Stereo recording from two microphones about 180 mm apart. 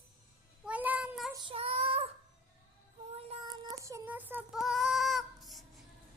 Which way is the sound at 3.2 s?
35° right (ahead or behind).